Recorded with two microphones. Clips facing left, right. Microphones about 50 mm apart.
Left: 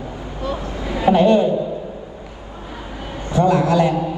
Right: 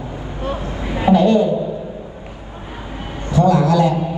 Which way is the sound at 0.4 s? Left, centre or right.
Right.